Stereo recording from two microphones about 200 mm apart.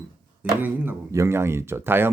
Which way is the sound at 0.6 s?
10° right (ahead or behind).